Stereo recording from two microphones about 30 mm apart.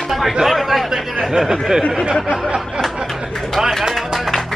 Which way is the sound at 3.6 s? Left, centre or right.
Centre.